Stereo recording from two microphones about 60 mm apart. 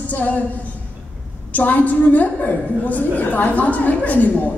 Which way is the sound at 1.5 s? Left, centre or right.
Left.